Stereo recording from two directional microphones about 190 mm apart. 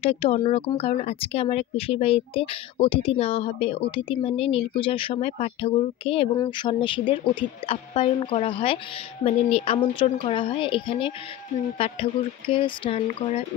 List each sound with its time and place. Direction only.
0.0 s speech: 30° left (ahead or behind)
12.5 s speech: 25° left (ahead or behind)